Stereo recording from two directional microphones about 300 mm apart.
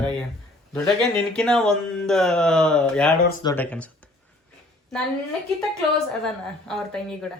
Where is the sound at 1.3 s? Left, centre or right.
Centre.